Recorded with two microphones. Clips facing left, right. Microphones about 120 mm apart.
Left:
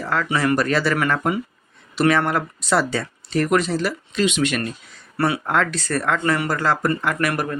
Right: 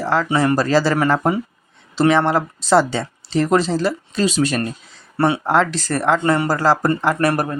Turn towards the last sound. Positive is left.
turn(degrees=-35)  # may be behind; listen again after turning